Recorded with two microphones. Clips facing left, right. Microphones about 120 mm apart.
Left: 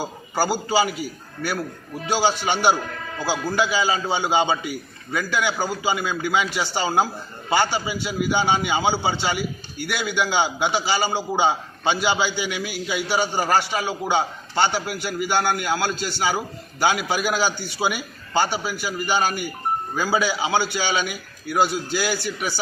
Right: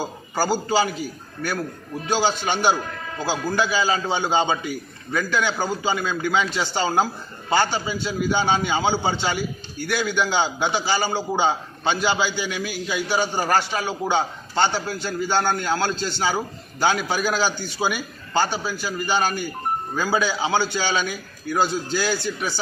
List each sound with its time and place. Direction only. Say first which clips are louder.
0.0 s a man's voice: left 1 dB; 15° left (ahead or behind)
2.0 s a man's voice: left 1 dB; 15° left (ahead or behind)